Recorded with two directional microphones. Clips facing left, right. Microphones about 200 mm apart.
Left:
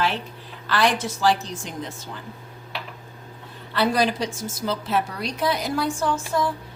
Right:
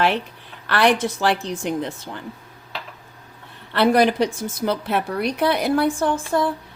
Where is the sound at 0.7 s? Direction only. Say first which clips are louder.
Right 4 dB; 60° right (ahead or behind).